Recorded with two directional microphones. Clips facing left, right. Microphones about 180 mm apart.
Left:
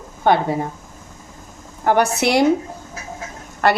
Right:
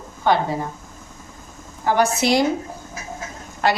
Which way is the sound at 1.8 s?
60° left (ahead or behind).